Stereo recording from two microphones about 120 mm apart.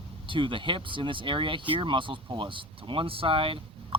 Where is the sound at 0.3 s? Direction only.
45° right (ahead or behind).